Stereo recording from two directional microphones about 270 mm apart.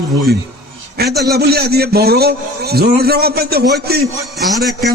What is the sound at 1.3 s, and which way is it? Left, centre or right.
A man's voice, right.